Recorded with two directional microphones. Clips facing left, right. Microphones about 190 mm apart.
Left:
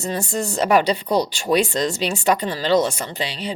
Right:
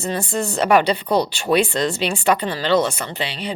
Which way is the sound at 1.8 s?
40° left (ahead or behind).